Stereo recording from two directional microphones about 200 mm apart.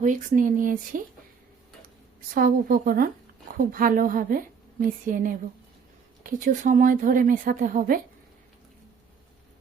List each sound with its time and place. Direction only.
0.0 s a woman's voice: 40° right (ahead or behind)
2.3 s a woman's voice: 45° right (ahead or behind)